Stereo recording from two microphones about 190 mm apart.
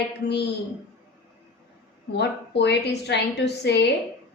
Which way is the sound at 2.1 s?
65° left (ahead or behind).